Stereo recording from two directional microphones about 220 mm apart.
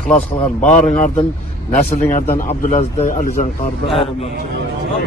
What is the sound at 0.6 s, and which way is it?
Speech, 35° left (ahead or behind).